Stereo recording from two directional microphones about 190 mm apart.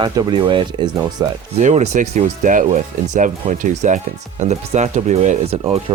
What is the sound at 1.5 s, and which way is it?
Speech, 35° right (ahead or behind).